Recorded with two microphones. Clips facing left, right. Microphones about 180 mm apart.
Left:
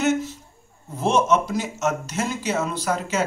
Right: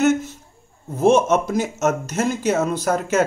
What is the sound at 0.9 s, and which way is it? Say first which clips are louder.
Speech: right 4 dB; 50° right (ahead or behind).